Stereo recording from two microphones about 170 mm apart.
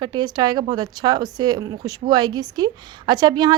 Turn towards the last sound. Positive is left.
turn(degrees=-25)  # may be behind; listen again after turning